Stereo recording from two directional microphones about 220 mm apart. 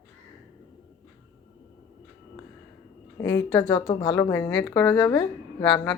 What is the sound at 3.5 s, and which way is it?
A woman's voice, 20° left (ahead or behind).